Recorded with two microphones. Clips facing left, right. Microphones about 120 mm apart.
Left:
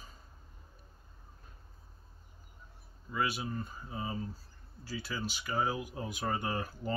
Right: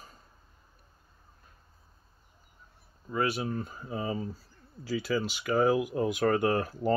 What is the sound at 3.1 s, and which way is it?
Speech, 55° right (ahead or behind).